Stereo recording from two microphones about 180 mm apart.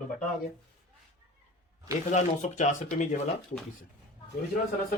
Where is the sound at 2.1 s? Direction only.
40° left (ahead or behind).